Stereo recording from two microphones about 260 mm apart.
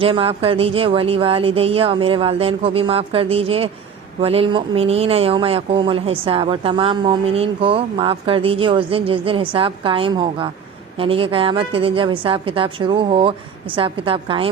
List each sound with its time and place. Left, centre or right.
0.0 s speech: right